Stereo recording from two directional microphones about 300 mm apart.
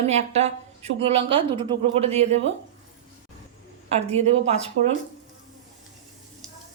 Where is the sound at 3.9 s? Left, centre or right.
Right.